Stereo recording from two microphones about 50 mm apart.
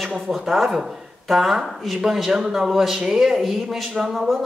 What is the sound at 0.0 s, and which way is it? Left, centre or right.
Speech, centre.